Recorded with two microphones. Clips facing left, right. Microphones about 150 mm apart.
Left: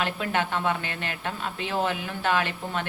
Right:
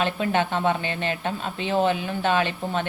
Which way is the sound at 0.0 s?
25° right (ahead or behind).